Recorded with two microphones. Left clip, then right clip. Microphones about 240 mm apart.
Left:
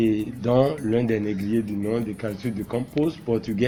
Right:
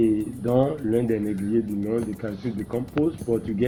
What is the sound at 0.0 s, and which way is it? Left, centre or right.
Speech, left.